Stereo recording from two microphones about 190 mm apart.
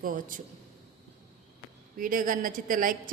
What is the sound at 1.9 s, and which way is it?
A woman's voice, 45° right (ahead or behind).